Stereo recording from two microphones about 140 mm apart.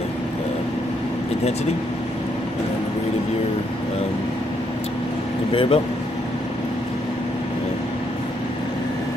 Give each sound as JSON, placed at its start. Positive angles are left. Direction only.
{"t": 5.5, "sound": "speech", "side_deg": 40}